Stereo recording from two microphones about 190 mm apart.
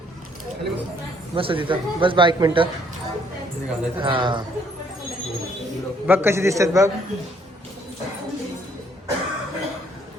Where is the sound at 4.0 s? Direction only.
25° right (ahead or behind).